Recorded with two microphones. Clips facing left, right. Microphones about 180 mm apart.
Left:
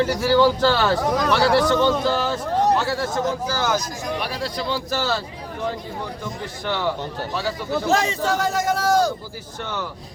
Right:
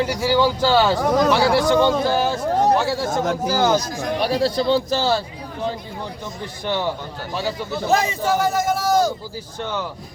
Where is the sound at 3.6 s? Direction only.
25° right (ahead or behind).